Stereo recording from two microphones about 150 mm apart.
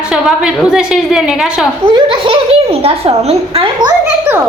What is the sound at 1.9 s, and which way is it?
A child's voice, 30° right (ahead or behind).